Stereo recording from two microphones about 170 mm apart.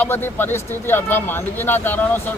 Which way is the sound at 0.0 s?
10° left (ahead or behind).